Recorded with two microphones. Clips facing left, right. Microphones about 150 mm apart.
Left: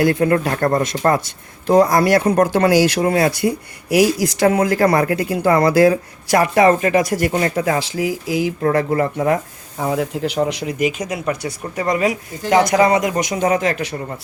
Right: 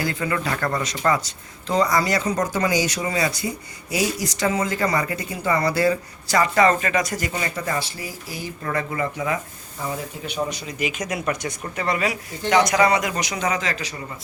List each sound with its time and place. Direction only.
0.0 s speech: 60° left (ahead or behind); by 8.5 s 90° left
8.6 s speech: 55° left (ahead or behind)
10.9 s speech: 30° left (ahead or behind)
11.3 s speech: 10° left (ahead or behind)
12.7 s speech: 50° left (ahead or behind)